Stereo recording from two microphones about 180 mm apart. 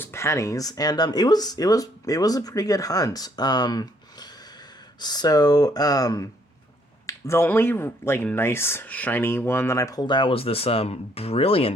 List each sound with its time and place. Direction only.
0.0 s speech: 15° left (ahead or behind); by 11.7 s 30° left (ahead or behind)